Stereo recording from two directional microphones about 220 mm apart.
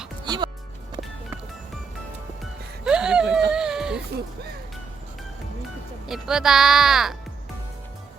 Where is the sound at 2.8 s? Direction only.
5° right (ahead or behind).